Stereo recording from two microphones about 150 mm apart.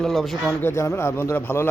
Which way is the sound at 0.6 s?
15° left (ahead or behind).